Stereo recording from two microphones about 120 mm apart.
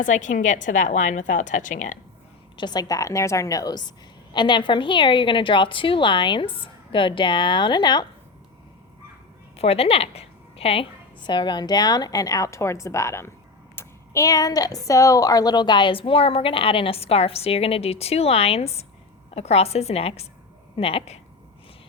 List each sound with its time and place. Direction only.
0.0 s a woman's voice: 90° left
2.6 s a woman's voice: 35° left (ahead or behind)
9.6 s a woman's voice: 55° left (ahead or behind)